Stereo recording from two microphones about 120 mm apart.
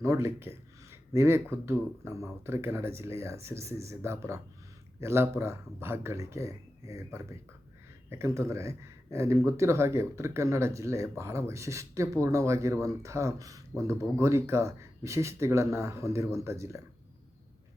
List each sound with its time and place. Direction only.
0.0 s speech: 25° right (ahead or behind)